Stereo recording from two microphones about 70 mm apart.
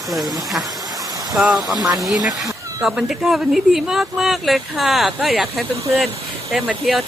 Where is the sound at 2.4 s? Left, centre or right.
Right.